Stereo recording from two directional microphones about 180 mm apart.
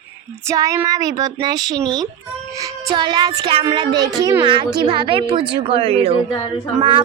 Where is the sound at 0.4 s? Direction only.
20° right (ahead or behind).